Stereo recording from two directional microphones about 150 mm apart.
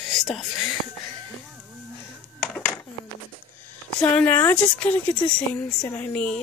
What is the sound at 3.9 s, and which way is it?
Speech, 10° left (ahead or behind).